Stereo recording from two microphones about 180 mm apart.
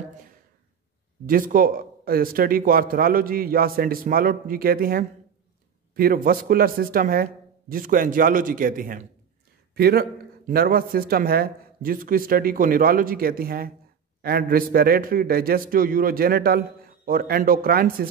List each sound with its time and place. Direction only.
1.2 s a man's voice: 50° right (ahead or behind)